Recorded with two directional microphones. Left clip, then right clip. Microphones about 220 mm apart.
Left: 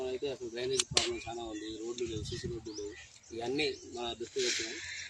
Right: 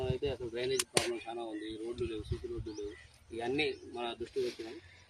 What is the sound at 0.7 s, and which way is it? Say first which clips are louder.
Speech: left 3 dB; 30° right (ahead or behind).